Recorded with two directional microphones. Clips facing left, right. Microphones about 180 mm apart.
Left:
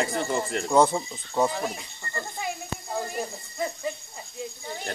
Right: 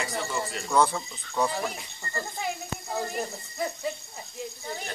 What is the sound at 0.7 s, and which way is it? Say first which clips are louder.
Speech: left 3 dB; 25° left (ahead or behind).